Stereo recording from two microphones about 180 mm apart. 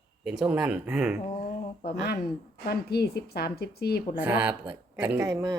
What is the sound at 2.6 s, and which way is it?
A woman's voice, 60° left (ahead or behind).